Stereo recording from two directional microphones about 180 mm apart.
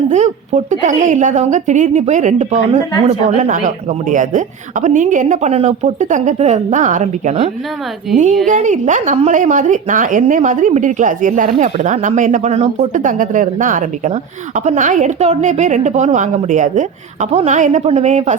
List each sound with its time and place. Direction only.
0.1 s a woman's voice: 40° right (ahead or behind)
8.1 s a woman's voice: centre (ahead or behind)
8.4 s a woman's voice: 40° right (ahead or behind)